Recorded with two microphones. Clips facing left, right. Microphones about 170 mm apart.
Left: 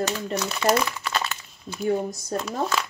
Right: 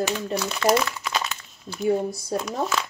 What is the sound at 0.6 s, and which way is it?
Crumpling, centre (ahead or behind).